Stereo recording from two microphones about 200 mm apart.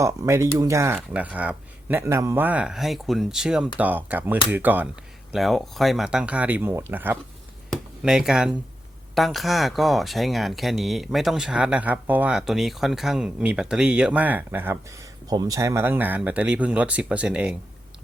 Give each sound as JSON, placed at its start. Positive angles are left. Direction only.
{"t": 0.0, "sound": "speech", "side_deg": -15}
{"t": 7.7, "sound": "a sound", "side_deg": -5}
{"t": 9.1, "sound": "speech", "side_deg": 0}